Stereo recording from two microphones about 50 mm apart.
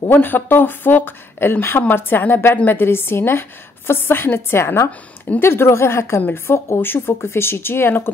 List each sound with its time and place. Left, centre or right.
0.1 s a woman's voice: left
6.2 s speech: left